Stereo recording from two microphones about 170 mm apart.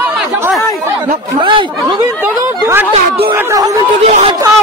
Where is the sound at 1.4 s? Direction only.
30° right (ahead or behind).